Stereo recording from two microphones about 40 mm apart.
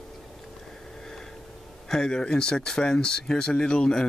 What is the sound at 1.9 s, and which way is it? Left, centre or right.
Speech, centre.